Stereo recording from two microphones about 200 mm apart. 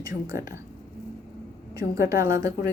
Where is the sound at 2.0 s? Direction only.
15° right (ahead or behind).